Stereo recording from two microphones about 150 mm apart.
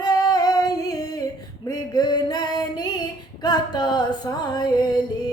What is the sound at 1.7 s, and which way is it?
Music, 25° left (ahead or behind).